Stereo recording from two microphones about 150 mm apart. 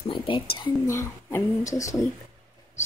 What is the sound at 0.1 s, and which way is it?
Speech, 35° left (ahead or behind).